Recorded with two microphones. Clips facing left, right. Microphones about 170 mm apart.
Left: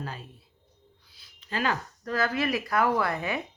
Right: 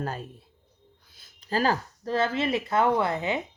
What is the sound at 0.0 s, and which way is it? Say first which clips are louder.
A woman's voice: right 6 dB; 45° right (ahead or behind).